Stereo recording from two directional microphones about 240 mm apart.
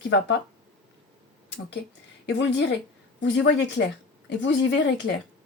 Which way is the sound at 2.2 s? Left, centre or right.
Left.